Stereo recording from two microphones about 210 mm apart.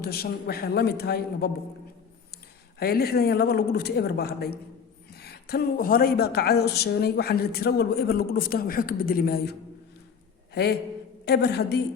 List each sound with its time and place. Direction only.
0.0 s speech: 45° left (ahead or behind)
2.7 s a man's voice: 45° left (ahead or behind)